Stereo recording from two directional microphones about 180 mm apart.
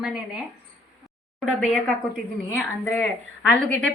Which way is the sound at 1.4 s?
5° left (ahead or behind).